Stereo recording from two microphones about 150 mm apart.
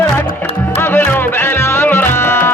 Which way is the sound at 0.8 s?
15° left (ahead or behind).